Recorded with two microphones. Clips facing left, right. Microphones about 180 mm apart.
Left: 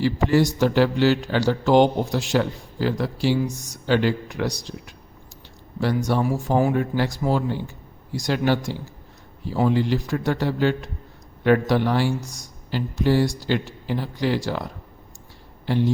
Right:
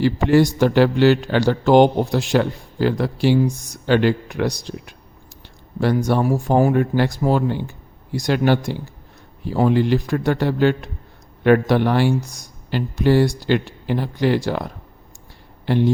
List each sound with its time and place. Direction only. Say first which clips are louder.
0.0 s a man's voice: right 4 dB; 60° right (ahead or behind)